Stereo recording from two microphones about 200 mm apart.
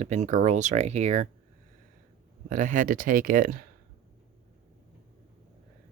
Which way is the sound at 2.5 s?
40° right (ahead or behind).